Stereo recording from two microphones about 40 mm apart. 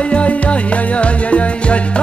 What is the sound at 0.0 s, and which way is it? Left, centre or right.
Music, left.